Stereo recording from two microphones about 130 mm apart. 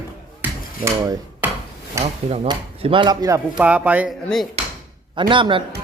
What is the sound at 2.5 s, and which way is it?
Speech, 40° right (ahead or behind).